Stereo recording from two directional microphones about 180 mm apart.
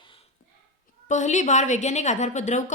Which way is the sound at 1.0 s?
40° left (ahead or behind).